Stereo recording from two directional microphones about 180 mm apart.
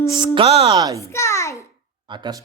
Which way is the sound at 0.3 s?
35° right (ahead or behind).